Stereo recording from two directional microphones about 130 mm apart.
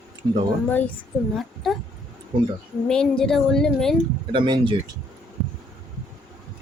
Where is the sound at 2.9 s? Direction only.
5° left (ahead or behind).